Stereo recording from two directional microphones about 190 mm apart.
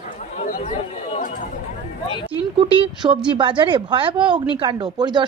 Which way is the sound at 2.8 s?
25° right (ahead or behind).